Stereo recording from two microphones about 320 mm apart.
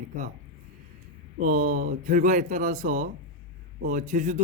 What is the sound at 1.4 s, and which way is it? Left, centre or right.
A man's voice, right.